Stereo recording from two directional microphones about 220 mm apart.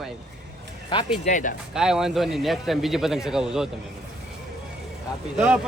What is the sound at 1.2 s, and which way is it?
Speech, 35° left (ahead or behind).